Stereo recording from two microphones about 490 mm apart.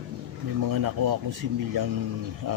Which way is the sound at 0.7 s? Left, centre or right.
Right.